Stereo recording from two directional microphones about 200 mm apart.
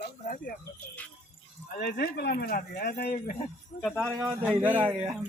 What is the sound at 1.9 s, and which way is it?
Speech, 55° left (ahead or behind).